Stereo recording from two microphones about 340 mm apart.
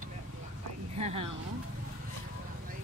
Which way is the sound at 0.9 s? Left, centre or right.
Centre.